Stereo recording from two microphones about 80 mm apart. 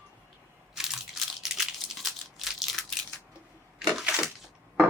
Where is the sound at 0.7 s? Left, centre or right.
Centre.